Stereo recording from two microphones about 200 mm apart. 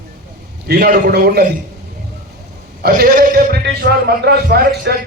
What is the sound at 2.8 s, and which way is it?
A man's voice, 45° right (ahead or behind).